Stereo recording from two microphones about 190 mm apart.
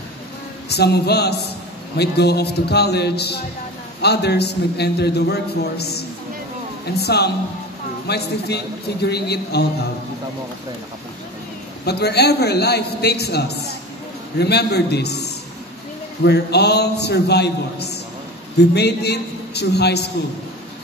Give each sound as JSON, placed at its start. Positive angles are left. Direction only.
{"t": 0.7, "sound": "a man's voice", "side_deg": 60}
{"t": 11.8, "sound": "a man's voice", "side_deg": 60}